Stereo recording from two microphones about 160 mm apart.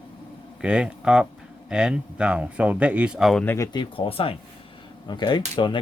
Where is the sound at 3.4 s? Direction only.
10° left (ahead or behind).